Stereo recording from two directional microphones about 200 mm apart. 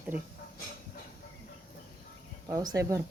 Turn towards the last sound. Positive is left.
turn(degrees=-15)  # may be behind; listen again after turning